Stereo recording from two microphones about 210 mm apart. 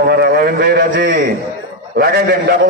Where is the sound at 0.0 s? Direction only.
50° right (ahead or behind).